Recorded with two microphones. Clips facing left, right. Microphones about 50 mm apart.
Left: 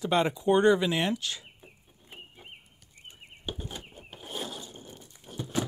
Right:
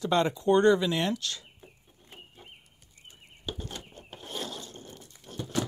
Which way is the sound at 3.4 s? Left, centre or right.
Centre.